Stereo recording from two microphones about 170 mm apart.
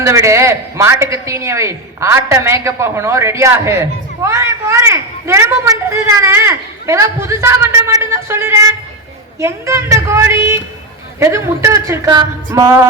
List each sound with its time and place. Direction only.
0.0 s speech: 15° right (ahead or behind)